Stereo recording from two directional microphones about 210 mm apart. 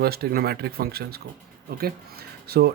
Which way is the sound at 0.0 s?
45° right (ahead or behind).